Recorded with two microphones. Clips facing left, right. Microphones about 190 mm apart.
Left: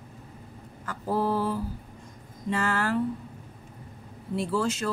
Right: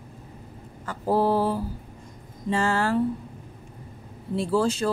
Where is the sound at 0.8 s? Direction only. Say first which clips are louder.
Right 5 dB; 30° right (ahead or behind).